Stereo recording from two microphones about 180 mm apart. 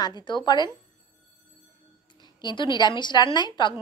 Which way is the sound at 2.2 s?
25° left (ahead or behind).